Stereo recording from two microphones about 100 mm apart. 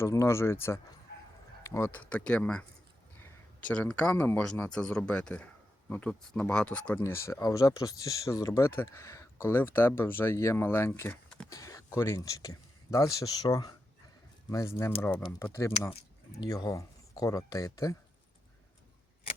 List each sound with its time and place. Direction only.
0.0 s speech: 30° left (ahead or behind)
2.0 s speech: 10° left (ahead or behind)
3.2 s a sound: 25° left (ahead or behind)
3.7 s speech: 10° left (ahead or behind)
7.0 s speech: 30° left (ahead or behind)
11.1 s a sound: 10° left (ahead or behind)
11.4 s speech: 35° left (ahead or behind)
14.8 s speech: 25° left (ahead or behind)
16.4 s speech: 40° left (ahead or behind)